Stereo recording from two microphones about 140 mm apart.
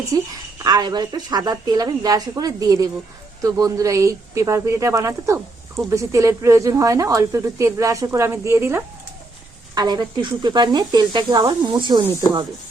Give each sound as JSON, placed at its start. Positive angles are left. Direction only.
{"t": 0.1, "sound": "speech", "side_deg": -25}
{"t": 9.7, "sound": "speech", "side_deg": -30}